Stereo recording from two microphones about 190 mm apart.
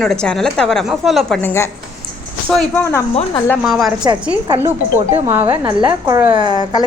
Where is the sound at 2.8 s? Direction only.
15° left (ahead or behind).